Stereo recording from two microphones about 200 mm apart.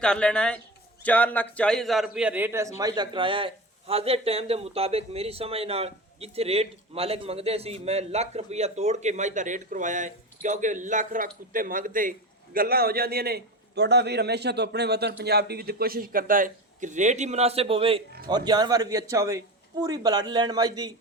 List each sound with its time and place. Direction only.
0.0 s a man's voice: 5° left (ahead or behind); by 20.9 s 20° right (ahead or behind)